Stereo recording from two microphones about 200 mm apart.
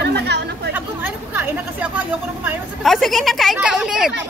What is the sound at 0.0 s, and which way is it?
Chatter, 55° right (ahead or behind).